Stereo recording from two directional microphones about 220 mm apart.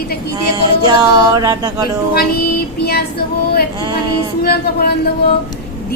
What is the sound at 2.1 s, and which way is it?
Speech, 45° left (ahead or behind).